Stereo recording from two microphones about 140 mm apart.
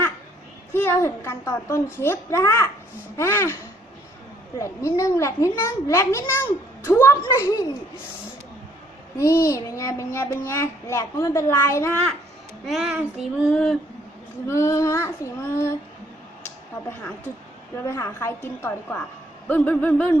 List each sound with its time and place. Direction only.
0.7 s child singing: 15° left (ahead or behind)
4.5 s child singing: 20° left (ahead or behind)
9.1 s child singing: 20° left (ahead or behind)
12.6 s speech: 5° right (ahead or behind)
14.4 s child singing: 20° left (ahead or behind)
17.8 s child singing: 20° left (ahead or behind)
19.5 s a sound: 10° left (ahead or behind)